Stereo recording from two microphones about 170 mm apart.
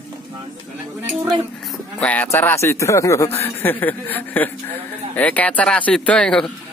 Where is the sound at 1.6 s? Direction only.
5° left (ahead or behind).